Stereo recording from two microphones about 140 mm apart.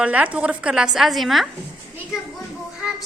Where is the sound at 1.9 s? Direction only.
5° right (ahead or behind).